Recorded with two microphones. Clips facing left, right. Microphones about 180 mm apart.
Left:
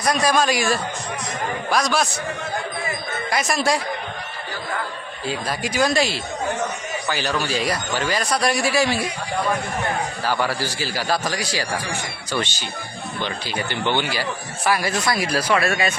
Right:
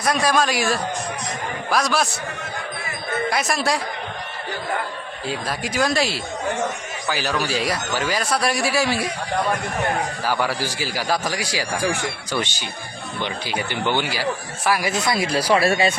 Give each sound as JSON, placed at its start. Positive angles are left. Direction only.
{"t": 0.0, "sound": "speech", "side_deg": 0}
{"t": 3.2, "sound": "speech", "side_deg": 0}
{"t": 5.3, "sound": "speech", "side_deg": 0}
{"t": 10.2, "sound": "a man's voice", "side_deg": -10}
{"t": 13.2, "sound": "a man's voice", "side_deg": -15}
{"t": 14.8, "sound": "speech", "side_deg": -20}